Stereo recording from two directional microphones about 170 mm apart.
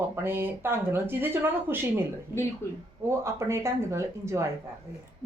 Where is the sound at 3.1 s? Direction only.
15° right (ahead or behind).